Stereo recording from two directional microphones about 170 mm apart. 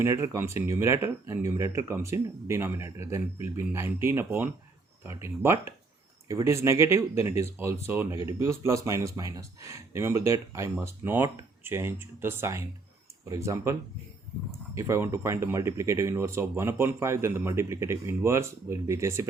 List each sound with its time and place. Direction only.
0.0 s speech: 15° right (ahead or behind)
14.8 s speech: 15° right (ahead or behind)